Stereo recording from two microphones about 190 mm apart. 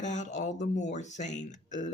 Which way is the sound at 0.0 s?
40° left (ahead or behind).